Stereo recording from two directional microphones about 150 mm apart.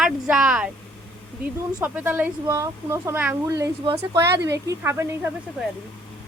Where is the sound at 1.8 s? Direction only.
10° right (ahead or behind).